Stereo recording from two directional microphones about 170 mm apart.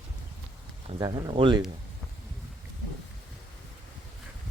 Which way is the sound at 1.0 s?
25° right (ahead or behind).